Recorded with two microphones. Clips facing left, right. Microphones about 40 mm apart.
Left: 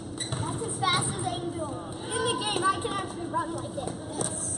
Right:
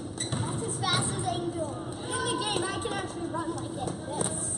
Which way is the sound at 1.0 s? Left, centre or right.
Centre.